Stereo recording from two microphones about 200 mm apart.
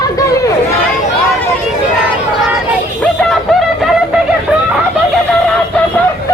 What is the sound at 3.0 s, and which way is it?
Music, 5° left (ahead or behind).